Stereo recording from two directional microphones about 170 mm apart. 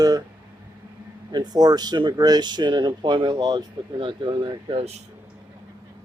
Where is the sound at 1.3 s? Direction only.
25° right (ahead or behind).